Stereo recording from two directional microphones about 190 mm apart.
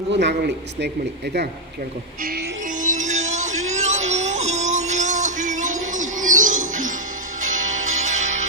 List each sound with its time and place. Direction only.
0.1 s a man's voice: 65° right (ahead or behind)
2.8 s music: 40° right (ahead or behind)